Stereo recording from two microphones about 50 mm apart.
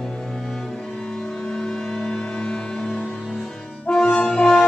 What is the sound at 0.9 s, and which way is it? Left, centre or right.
Music, centre.